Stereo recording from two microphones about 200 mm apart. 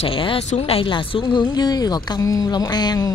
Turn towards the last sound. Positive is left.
turn(degrees=20)  # may be behind; listen again after turning